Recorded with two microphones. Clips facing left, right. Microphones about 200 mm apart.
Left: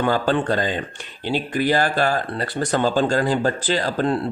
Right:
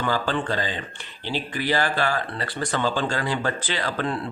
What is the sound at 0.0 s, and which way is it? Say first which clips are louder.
Speech: left 5 dB; 50° left (ahead or behind).